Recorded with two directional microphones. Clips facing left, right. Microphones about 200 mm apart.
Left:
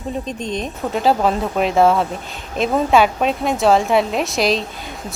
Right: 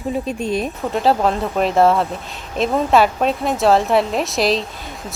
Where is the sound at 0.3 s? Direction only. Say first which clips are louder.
Right 3 dB; 10° right (ahead or behind).